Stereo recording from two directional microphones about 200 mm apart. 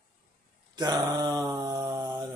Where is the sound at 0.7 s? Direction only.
20° right (ahead or behind).